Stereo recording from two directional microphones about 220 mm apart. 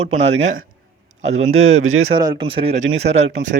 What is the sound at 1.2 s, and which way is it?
Speech, 30° right (ahead or behind).